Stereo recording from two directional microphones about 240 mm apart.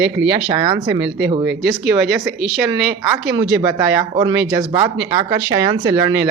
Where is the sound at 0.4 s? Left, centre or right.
Centre.